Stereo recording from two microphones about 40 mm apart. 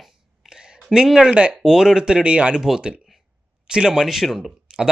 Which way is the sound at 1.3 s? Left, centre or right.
Right.